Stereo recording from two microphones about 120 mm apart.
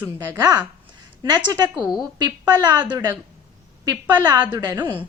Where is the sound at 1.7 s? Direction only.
5° right (ahead or behind).